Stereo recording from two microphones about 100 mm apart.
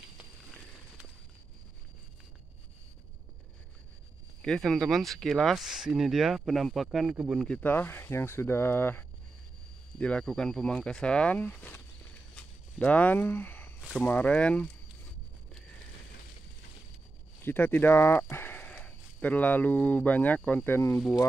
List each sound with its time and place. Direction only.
4.4 s speech: 5° left (ahead or behind)
7.3 s speech: 10° left (ahead or behind)
7.7 s speech: 20° left (ahead or behind)
9.9 s speech: 10° left (ahead or behind)
17.4 s speech: 20° left (ahead or behind)